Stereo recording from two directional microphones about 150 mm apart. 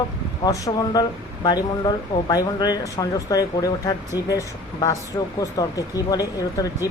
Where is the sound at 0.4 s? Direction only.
25° left (ahead or behind).